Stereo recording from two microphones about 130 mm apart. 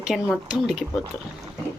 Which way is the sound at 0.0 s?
5° right (ahead or behind).